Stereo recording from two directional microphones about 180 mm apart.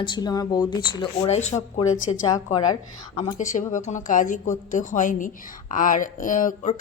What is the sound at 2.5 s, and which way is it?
Speech, 25° left (ahead or behind).